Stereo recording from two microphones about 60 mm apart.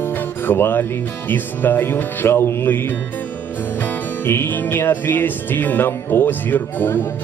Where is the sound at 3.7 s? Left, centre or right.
Left.